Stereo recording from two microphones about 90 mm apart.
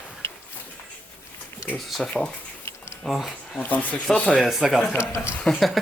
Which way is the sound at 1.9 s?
5° left (ahead or behind).